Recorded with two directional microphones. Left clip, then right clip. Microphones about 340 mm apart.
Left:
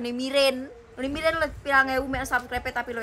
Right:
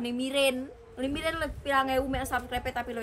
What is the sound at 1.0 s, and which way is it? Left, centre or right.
Speech, centre.